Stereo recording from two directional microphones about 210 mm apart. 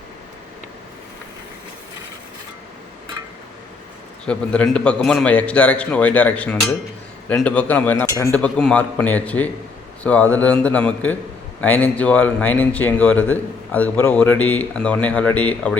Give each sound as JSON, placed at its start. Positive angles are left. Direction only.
{"t": 4.3, "sound": "a man's voice", "side_deg": 5}